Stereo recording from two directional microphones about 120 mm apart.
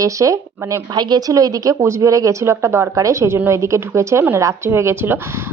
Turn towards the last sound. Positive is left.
turn(degrees=-20)  # may be behind; listen again after turning